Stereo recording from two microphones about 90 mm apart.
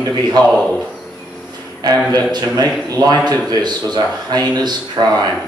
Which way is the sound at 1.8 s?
55° right (ahead or behind).